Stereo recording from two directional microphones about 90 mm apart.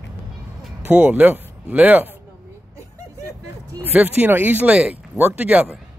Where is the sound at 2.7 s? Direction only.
40° right (ahead or behind).